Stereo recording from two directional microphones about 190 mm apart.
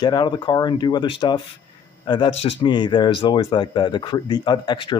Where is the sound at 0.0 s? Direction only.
20° left (ahead or behind).